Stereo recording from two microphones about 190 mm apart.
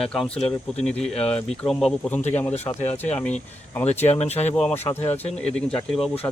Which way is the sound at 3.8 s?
35° left (ahead or behind).